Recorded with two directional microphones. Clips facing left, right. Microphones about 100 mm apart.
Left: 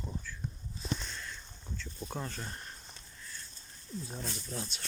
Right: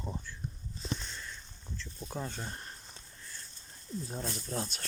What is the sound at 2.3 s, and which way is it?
Speech, 20° right (ahead or behind).